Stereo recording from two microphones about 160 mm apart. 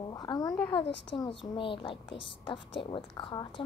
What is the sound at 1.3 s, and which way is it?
A woman's voice, 30° left (ahead or behind).